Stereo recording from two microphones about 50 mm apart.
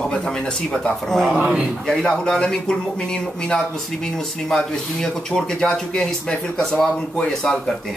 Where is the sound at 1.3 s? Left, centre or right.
Centre.